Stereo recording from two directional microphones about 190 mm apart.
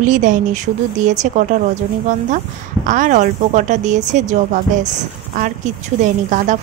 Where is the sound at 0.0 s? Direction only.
40° right (ahead or behind).